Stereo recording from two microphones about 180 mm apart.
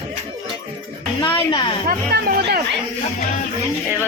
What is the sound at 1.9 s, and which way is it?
Speech, 55° right (ahead or behind).